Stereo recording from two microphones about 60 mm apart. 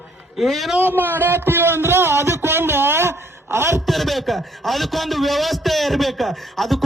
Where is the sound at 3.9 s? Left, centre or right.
Centre.